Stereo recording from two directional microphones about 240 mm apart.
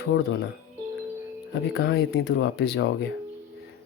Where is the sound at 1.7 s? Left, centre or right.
Left.